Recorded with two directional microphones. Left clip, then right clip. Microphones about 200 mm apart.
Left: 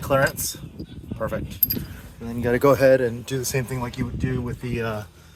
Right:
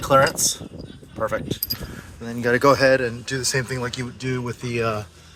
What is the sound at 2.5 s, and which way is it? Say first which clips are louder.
Speech: even; 25° left (ahead or behind).